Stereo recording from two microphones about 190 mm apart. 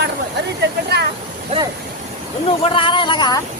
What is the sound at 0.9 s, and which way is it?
Speech, 60° right (ahead or behind).